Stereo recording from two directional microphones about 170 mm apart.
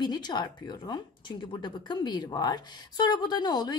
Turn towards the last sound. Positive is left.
turn(degrees=25)  # may be behind; listen again after turning